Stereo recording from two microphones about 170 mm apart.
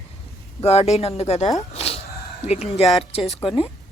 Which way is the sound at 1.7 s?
35° left (ahead or behind).